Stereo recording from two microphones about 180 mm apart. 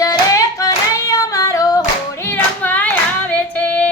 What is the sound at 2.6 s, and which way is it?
Music, 10° left (ahead or behind).